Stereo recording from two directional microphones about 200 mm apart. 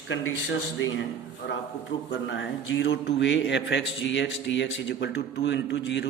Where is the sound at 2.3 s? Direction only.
65° left (ahead or behind).